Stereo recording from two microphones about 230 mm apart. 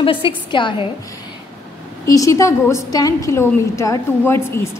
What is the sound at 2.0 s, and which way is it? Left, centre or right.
A woman's voice, centre.